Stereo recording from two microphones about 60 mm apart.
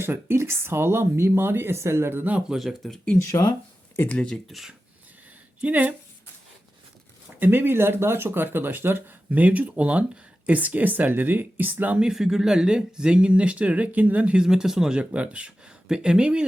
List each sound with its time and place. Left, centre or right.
0.0 s speech: right
2.5 s speech: centre
3.2 s speech: left
4.1 s speech: centre
4.4 s speech: centre
5.6 s speech: right
7.3 s speech: right
11.9 s speech: centre
14.4 s speech: centre
15.1 s speech: right